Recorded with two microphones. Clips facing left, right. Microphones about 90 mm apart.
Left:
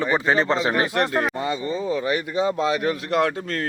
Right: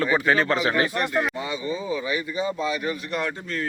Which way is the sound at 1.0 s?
40° left (ahead or behind).